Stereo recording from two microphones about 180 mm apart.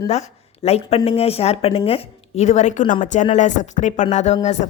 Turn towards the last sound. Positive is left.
turn(degrees=40)  # may be behind; listen again after turning